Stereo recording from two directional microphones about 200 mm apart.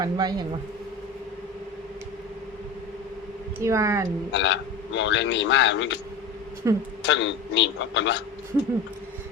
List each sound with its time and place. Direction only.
0.0 s speech: 20° right (ahead or behind)
3.6 s speech: 15° right (ahead or behind)
4.3 s a man's voice: 60° left (ahead or behind)
6.6 s speech: 15° right (ahead or behind)
7.0 s a man's voice: 65° left (ahead or behind)